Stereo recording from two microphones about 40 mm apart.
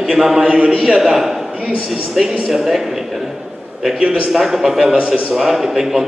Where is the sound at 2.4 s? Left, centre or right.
Centre.